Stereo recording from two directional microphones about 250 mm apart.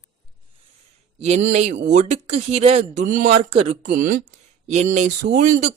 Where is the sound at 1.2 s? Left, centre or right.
Right.